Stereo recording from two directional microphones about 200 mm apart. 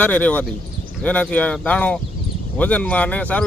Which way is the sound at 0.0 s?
5° left (ahead or behind).